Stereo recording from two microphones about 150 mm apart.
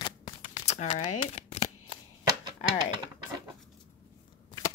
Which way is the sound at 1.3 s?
45° left (ahead or behind).